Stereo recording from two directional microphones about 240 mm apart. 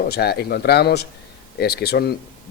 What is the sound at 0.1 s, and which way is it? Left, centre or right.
A man's voice, left.